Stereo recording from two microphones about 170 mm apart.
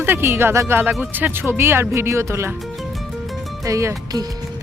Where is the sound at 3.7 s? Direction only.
20° right (ahead or behind).